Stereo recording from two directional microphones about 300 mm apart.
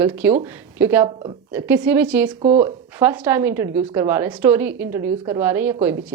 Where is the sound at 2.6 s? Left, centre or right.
Centre.